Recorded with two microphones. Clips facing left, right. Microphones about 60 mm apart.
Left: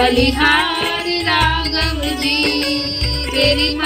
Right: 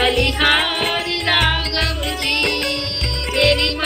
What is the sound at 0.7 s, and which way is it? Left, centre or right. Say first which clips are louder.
Music: left 1 dB; centre.